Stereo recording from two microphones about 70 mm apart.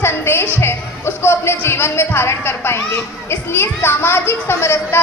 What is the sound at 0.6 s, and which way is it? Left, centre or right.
A woman's voice, left.